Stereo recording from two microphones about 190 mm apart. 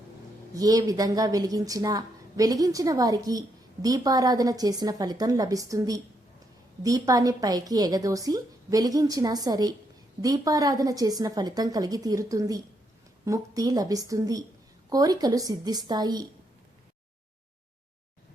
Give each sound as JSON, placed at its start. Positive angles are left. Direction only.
{"t": 0.5, "sound": "a woman's voice", "side_deg": -20}